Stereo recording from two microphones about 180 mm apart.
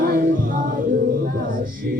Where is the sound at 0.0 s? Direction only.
50° right (ahead or behind).